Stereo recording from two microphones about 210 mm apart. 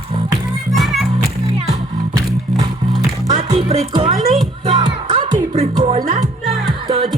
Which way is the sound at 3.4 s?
25° right (ahead or behind).